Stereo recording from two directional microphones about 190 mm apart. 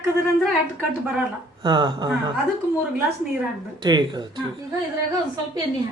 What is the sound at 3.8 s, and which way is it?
Speech, 25° right (ahead or behind).